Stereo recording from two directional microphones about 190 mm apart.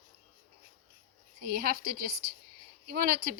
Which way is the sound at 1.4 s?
50° right (ahead or behind).